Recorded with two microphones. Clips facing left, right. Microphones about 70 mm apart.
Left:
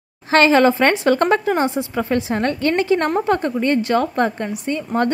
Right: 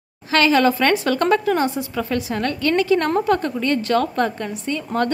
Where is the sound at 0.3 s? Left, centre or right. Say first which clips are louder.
Left 3 dB; left.